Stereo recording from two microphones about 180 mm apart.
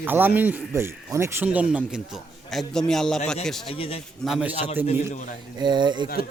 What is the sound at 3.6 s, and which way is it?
Speech, 30° left (ahead or behind).